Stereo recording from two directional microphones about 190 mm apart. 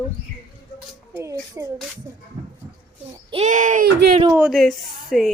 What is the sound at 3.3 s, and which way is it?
Speech, 40° right (ahead or behind).